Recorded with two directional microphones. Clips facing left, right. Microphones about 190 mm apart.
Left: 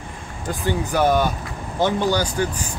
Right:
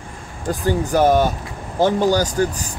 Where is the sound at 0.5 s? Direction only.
40° right (ahead or behind).